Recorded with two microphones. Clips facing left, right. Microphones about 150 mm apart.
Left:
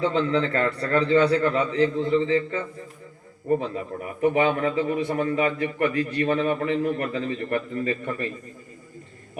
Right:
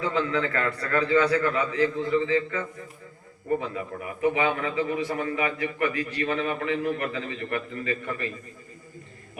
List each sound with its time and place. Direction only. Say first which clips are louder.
0.0 s a man's voice: left 4 dB; 30° left (ahead or behind)